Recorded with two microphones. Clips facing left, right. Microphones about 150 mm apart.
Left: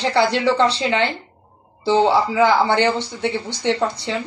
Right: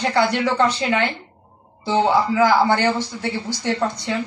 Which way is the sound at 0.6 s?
30° left (ahead or behind).